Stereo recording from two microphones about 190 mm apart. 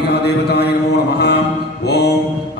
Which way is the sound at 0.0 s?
60° left (ahead or behind).